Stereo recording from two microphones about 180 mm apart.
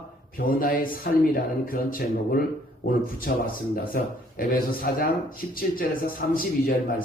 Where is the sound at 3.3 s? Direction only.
55° left (ahead or behind).